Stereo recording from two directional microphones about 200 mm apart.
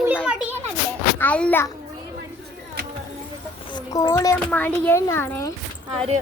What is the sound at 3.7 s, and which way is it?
Speech, 15° left (ahead or behind).